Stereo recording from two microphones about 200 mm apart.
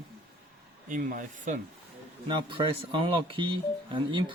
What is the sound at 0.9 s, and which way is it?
Speech, 40° right (ahead or behind).